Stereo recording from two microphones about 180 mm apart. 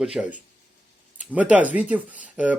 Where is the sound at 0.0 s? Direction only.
5° right (ahead or behind).